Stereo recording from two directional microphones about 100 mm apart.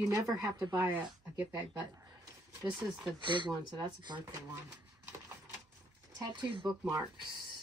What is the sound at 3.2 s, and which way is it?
Speech, 50° right (ahead or behind).